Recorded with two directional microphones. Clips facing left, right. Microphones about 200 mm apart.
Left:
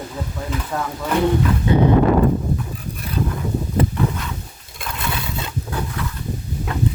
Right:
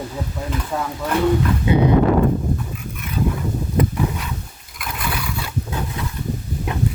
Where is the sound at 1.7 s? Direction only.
10° right (ahead or behind).